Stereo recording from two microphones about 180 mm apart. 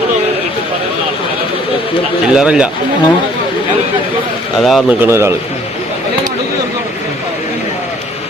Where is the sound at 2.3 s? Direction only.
5° right (ahead or behind).